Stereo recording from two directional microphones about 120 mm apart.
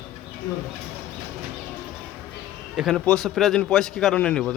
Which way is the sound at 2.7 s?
Centre (ahead or behind).